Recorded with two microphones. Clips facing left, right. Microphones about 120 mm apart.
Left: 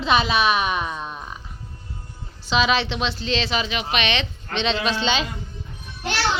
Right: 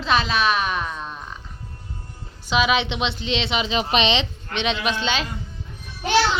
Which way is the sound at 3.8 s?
30° right (ahead or behind).